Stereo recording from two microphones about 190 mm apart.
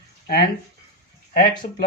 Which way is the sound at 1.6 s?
40° left (ahead or behind).